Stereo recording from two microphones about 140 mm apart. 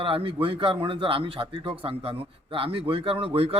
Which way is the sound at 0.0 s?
40° right (ahead or behind).